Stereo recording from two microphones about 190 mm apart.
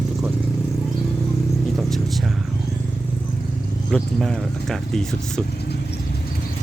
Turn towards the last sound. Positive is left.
turn(degrees=5)  # may be behind; listen again after turning